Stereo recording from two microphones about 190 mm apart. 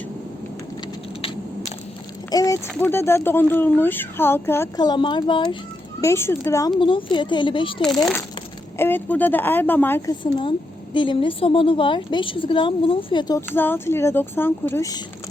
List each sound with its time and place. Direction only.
2.3 s speech: 15° left (ahead or behind)
6.0 s a woman's voice: 15° left (ahead or behind)
7.8 s speech: centre (ahead or behind)
10.9 s a woman's voice: 25° left (ahead or behind)